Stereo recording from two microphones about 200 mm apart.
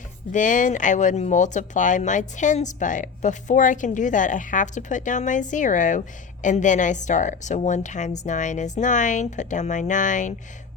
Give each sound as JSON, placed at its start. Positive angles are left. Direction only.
{"t": 0.3, "sound": "speech", "side_deg": 40}